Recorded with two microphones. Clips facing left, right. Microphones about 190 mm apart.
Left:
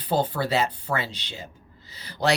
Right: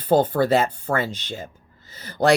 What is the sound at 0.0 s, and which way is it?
Speech, 50° right (ahead or behind).